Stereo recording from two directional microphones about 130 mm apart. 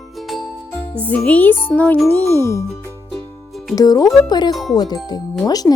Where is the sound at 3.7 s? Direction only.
30° left (ahead or behind).